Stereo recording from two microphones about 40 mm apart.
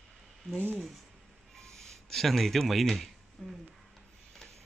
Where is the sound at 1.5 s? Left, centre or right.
Centre.